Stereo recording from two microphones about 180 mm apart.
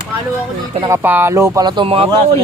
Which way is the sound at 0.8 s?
15° right (ahead or behind).